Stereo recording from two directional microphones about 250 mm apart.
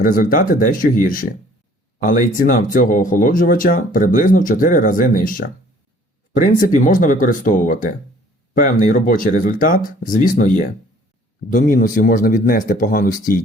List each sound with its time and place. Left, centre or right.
0.0 s speech: left